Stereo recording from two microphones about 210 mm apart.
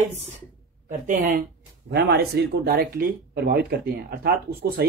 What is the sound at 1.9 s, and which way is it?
Speech, 50° right (ahead or behind).